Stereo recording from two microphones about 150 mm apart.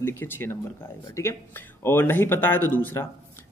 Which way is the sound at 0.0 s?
15° left (ahead or behind).